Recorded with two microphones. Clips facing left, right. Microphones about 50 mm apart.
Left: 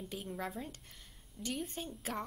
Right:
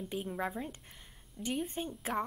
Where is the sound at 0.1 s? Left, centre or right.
Centre.